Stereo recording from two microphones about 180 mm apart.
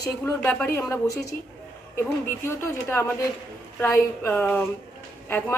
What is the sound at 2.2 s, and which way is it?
A man's voice, 15° left (ahead or behind).